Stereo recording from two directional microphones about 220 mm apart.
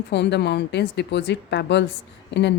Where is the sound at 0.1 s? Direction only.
50° left (ahead or behind).